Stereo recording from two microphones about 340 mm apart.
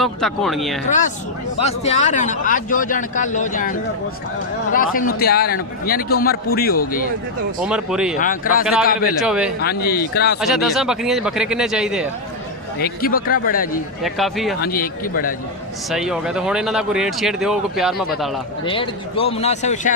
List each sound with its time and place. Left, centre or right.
0.0 s speech: centre
0.9 s a man's voice: left
7.6 s speech: centre
8.2 s a man's voice: left
9.2 s speech: centre
9.6 s a man's voice: left
10.4 s speech: centre
12.8 s a man's voice: left
14.0 s speech: centre
14.6 s a man's voice: left
15.9 s speech: centre
18.6 s speech: centre